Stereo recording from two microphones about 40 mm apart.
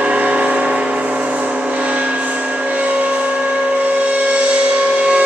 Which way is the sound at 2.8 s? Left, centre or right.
Right.